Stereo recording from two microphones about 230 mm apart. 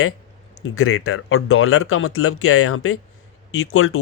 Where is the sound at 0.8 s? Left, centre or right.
Left.